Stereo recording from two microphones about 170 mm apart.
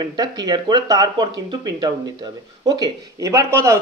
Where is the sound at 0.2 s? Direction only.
25° right (ahead or behind).